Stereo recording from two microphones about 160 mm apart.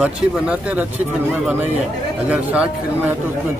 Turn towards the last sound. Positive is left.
turn(degrees=-10)  # may be behind; listen again after turning